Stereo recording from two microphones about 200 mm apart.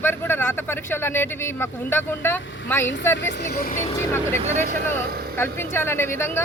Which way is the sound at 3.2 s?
60° left (ahead or behind).